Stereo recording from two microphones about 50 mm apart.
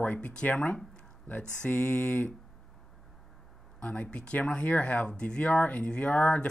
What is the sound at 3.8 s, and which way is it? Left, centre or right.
Speech, left.